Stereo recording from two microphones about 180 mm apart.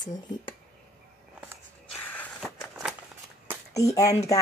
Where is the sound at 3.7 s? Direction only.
20° left (ahead or behind).